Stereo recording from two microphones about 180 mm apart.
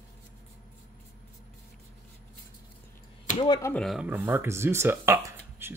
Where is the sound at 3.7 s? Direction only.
Centre (ahead or behind).